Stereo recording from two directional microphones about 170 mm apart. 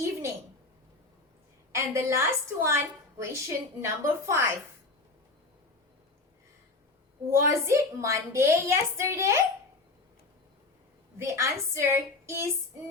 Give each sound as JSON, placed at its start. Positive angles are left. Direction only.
{"t": 1.7, "sound": "a woman's voice", "side_deg": -15}
{"t": 7.3, "sound": "a woman's voice", "side_deg": -15}
{"t": 11.2, "sound": "a woman's voice", "side_deg": -15}